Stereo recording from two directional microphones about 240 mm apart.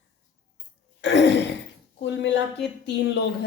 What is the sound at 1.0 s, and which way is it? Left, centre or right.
Throat clearing, left.